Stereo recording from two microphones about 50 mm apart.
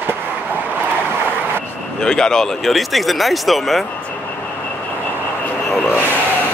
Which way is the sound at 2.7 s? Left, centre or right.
Centre.